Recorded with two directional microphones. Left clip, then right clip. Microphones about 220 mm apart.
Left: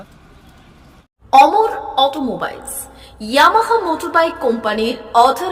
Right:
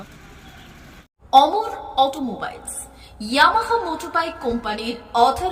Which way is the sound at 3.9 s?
15° left (ahead or behind).